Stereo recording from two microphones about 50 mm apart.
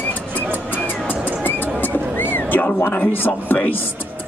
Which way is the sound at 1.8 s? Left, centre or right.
Left.